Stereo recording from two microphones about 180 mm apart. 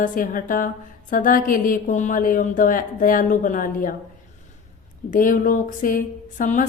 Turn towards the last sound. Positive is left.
turn(degrees=45)  # may be behind; listen again after turning